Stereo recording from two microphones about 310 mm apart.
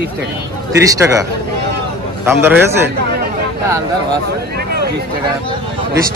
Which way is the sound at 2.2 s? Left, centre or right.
Centre.